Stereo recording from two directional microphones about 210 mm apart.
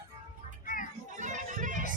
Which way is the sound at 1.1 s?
35° right (ahead or behind).